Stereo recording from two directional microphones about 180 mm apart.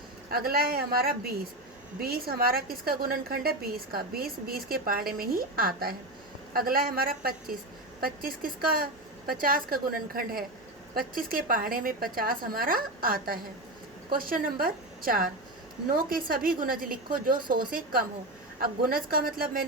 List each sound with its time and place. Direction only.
0.3 s a woman's voice: 55° right (ahead or behind)